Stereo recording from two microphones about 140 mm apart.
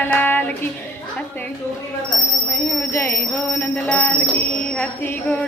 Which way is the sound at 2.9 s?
20° left (ahead or behind).